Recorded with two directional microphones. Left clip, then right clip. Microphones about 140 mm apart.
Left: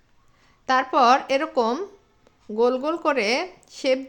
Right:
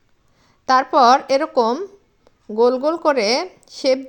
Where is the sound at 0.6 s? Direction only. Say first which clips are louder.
Right 5 dB; 20° right (ahead or behind).